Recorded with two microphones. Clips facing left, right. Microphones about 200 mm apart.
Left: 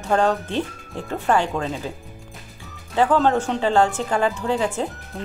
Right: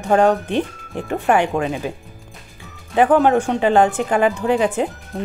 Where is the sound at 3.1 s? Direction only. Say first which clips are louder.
Right 4 dB; 15° right (ahead or behind).